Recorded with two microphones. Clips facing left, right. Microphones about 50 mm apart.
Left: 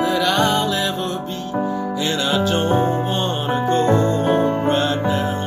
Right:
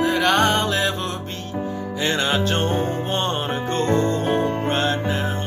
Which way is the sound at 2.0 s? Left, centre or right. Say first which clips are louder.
Even; right.